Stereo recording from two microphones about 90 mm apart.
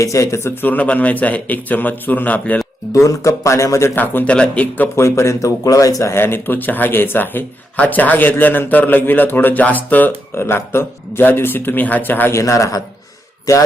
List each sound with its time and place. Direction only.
0.0 s speech: 35° left (ahead or behind); by 2.6 s 15° left (ahead or behind)
2.9 s speech: 35° left (ahead or behind)
3.9 s speech: 20° left (ahead or behind)
4.9 s speech: 30° left (ahead or behind)
6.0 s speech: 30° left (ahead or behind)
12.4 s speech: 35° left (ahead or behind)